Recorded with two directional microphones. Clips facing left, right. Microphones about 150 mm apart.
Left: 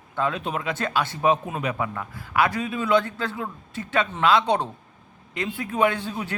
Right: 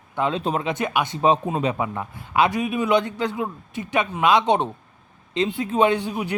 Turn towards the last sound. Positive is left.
turn(degrees=-15)  # may be behind; listen again after turning